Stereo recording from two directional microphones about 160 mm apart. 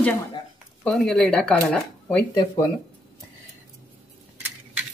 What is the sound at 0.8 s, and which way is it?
Speech, 5° left (ahead or behind).